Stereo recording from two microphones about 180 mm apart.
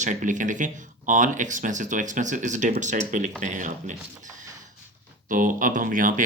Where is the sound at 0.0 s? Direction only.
45° right (ahead or behind).